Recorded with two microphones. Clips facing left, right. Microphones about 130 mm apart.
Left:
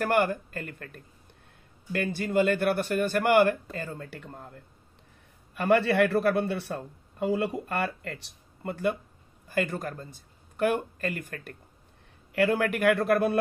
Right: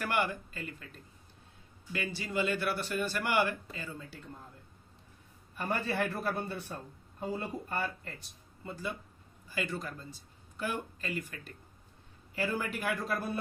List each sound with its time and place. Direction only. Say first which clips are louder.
0.0 s a man's voice: left 7 dB; 50° left (ahead or behind); by 4.6 s 70° left (ahead or behind)
5.5 s a man's voice: left 11 dB; 80° left
9.5 s speech: left 7 dB; 50° left (ahead or behind)
12.4 s a man's voice: left 10 dB; 65° left (ahead or behind)